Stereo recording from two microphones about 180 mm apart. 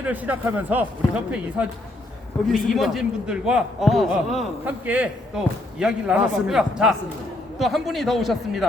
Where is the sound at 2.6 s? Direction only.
Centre (ahead or behind).